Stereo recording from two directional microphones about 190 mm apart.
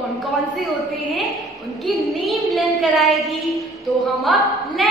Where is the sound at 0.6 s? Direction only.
Centre (ahead or behind).